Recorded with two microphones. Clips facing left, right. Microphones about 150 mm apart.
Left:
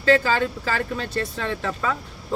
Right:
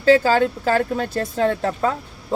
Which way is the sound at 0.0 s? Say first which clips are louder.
Right 4 dB; 40° right (ahead or behind).